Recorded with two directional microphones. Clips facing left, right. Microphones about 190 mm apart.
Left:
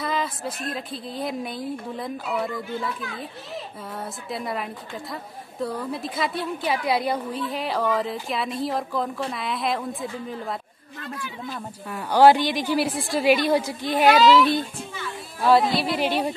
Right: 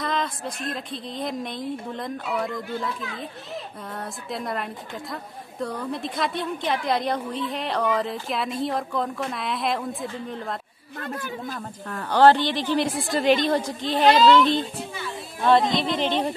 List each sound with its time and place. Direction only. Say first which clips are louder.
0.0 s a woman's voice: even; 5° left (ahead or behind)
11.0 s speech: right 3 dB; 50° right (ahead or behind)
11.9 s a woman's voice: left 1 dB; 10° left (ahead or behind)